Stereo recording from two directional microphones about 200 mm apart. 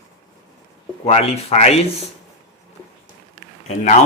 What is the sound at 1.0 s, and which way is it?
Speech, 30° left (ahead or behind).